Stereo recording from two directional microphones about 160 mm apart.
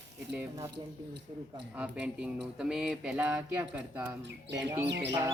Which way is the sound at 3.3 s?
10° right (ahead or behind).